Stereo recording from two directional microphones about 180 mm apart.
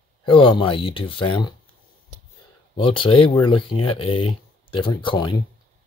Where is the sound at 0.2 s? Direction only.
30° left (ahead or behind).